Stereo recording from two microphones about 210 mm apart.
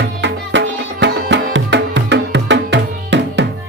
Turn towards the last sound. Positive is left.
turn(degrees=-60)  # may be behind; listen again after turning